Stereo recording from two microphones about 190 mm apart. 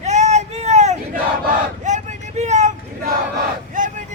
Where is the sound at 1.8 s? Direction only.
40° right (ahead or behind).